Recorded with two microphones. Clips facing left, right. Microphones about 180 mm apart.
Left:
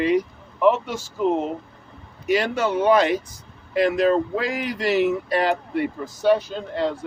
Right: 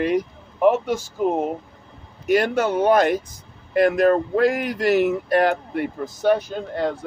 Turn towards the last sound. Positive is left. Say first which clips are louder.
# even
turn(degrees=-50)  # may be behind; listen again after turning